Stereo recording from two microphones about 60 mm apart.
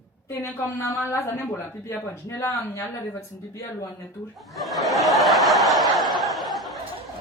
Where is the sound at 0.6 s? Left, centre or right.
Left.